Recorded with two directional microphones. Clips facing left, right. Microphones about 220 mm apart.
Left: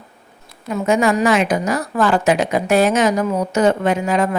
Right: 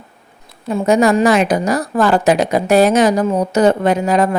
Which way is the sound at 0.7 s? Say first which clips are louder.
Right 4 dB; 35° right (ahead or behind).